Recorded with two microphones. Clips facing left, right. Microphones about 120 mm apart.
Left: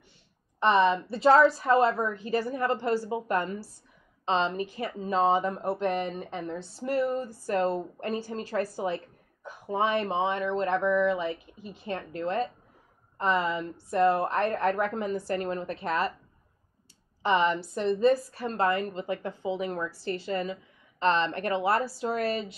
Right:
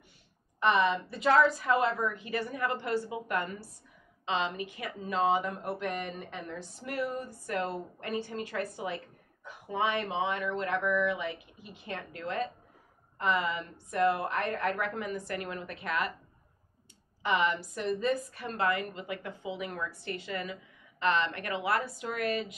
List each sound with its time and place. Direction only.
0.6 s a woman's voice: 30° left (ahead or behind)
17.2 s speech: 30° left (ahead or behind)